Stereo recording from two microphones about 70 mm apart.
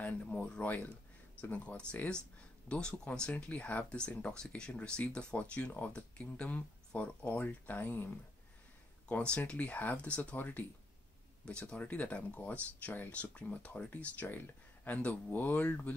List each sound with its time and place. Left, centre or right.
0.0 s speech: left
9.1 s speech: centre
11.4 s speech: centre